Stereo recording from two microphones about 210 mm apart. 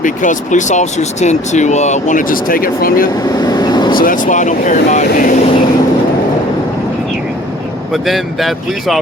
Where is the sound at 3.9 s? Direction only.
40° left (ahead or behind).